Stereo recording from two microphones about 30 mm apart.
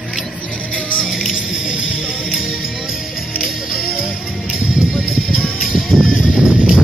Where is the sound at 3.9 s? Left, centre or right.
Right.